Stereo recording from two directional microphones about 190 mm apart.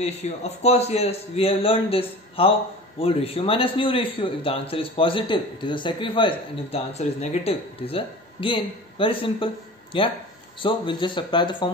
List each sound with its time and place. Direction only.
0.0 s a man's voice: 35° left (ahead or behind)